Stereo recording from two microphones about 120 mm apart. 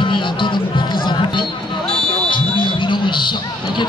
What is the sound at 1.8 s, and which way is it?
Music, 5° left (ahead or behind).